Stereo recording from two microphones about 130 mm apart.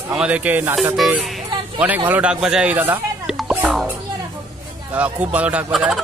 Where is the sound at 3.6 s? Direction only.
Centre (ahead or behind).